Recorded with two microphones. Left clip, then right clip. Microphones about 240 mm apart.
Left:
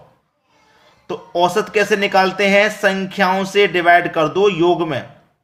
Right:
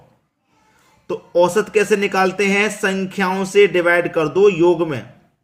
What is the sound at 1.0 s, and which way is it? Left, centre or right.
A man's voice, centre.